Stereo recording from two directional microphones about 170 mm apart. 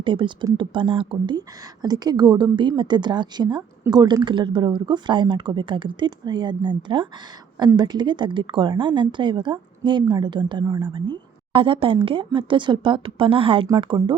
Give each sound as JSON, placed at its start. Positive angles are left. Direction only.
{"t": 0.0, "sound": "a woman's voice", "side_deg": -30}